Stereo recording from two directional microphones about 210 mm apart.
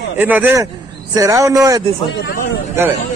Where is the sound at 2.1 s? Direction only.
55° left (ahead or behind).